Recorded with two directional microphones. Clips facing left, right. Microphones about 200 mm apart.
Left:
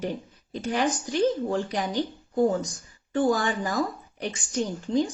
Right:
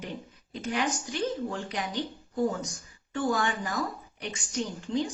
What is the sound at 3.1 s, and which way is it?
Speech, 35° left (ahead or behind).